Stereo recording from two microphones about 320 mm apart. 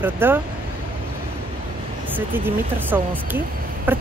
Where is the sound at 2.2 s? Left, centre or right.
Centre.